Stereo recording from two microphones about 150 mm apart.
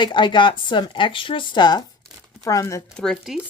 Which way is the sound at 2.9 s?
5° left (ahead or behind).